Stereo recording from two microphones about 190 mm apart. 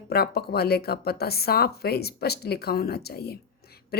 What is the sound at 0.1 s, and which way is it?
A woman's voice, 55° left (ahead or behind).